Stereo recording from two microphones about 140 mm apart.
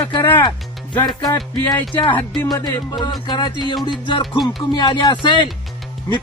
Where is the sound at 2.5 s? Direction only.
25° left (ahead or behind).